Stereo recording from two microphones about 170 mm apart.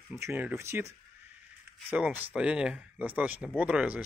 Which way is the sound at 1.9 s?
10° right (ahead or behind).